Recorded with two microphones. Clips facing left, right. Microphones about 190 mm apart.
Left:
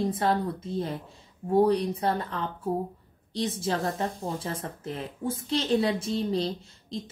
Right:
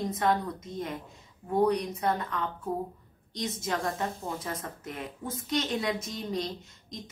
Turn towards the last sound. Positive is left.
turn(degrees=30)  # may be behind; listen again after turning